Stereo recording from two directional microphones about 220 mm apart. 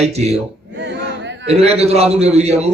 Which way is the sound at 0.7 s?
55° right (ahead or behind).